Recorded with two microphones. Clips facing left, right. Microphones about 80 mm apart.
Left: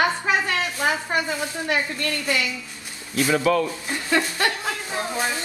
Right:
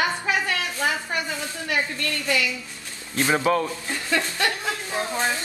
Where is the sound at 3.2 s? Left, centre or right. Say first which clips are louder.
Left 1 dB; right.